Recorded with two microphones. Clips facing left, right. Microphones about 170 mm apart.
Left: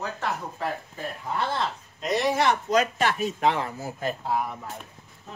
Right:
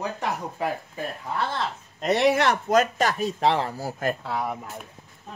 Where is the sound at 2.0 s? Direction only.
65° right (ahead or behind).